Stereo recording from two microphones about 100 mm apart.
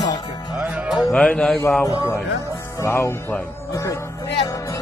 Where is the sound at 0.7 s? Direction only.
10° right (ahead or behind).